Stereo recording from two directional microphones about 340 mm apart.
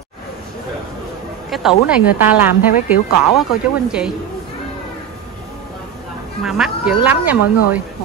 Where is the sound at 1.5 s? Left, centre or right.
Centre.